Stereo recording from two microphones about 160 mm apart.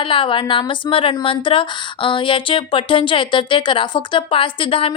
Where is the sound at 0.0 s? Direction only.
35° left (ahead or behind).